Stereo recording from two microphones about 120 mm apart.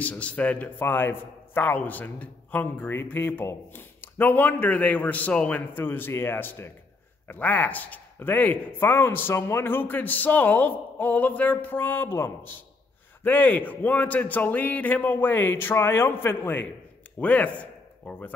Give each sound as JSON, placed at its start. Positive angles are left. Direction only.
{"t": 0.0, "sound": "a man's voice", "side_deg": 10}